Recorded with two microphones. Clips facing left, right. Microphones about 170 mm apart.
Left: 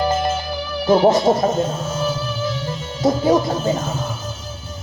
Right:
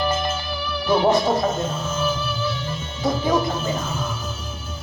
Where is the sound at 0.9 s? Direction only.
40° left (ahead or behind).